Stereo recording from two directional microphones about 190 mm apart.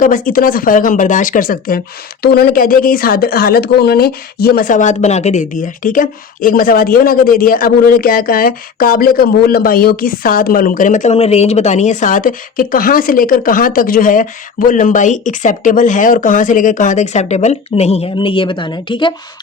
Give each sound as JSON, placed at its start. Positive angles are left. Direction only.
{"t": 0.0, "sound": "speech", "side_deg": 45}